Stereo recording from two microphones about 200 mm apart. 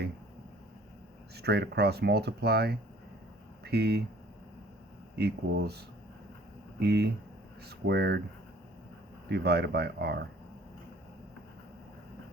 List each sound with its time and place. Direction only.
1.4 s speech: 55° right (ahead or behind)
5.1 s speech: 55° right (ahead or behind)
9.3 s speech: 55° right (ahead or behind)